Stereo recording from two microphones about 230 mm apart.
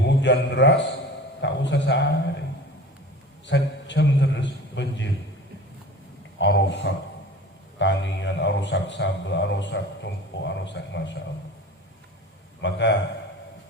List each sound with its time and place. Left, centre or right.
0.0 s a man's voice: left
3.4 s a man's voice: left
6.4 s speech: left
12.6 s speech: left